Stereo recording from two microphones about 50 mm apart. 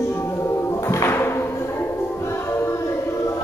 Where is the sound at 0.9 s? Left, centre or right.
Left.